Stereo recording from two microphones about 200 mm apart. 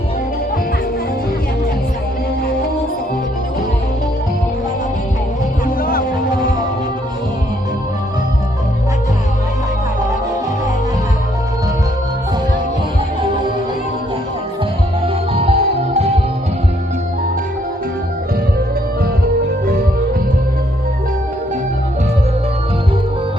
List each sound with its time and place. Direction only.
5.6 s music: 45° left (ahead or behind)
15.0 s music: 30° right (ahead or behind)